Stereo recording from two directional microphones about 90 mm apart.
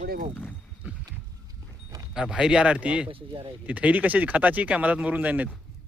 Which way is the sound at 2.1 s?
10° right (ahead or behind).